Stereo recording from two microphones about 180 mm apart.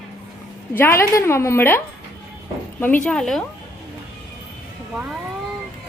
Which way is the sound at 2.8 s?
5° left (ahead or behind).